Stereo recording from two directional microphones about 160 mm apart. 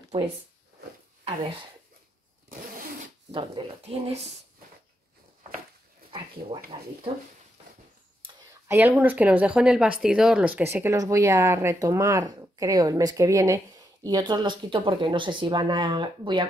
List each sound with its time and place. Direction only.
1.2 s speech: 35° right (ahead or behind)
2.5 s zipper: 60° right (ahead or behind)
3.3 s speech: 30° right (ahead or behind)
6.7 s speech: 25° right (ahead or behind)
8.6 s speech: 15° right (ahead or behind); by 16.4 s 30° right (ahead or behind)